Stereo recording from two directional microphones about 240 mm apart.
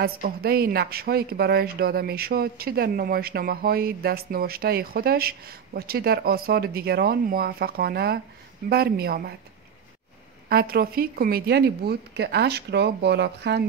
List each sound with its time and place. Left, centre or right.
0.0 s speech: right
10.5 s a woman's voice: right